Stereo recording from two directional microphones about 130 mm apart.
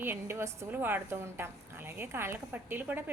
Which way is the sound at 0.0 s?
20° right (ahead or behind).